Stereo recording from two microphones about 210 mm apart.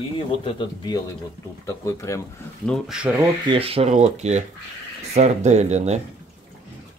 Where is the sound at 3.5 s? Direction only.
25° right (ahead or behind).